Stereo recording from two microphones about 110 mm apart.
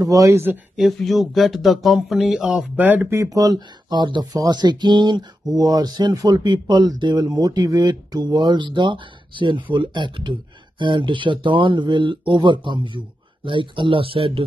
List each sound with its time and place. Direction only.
0.0 s speech: 30° right (ahead or behind)
0.7 s speech: centre (ahead or behind); by 14.4 s 55° right (ahead or behind)